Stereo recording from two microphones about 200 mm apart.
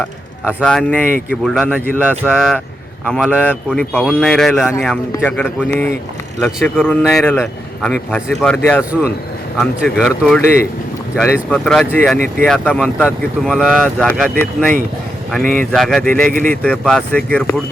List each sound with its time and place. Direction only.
0.4 s speech: 5° left (ahead or behind)
2.3 s speech: centre (ahead or behind)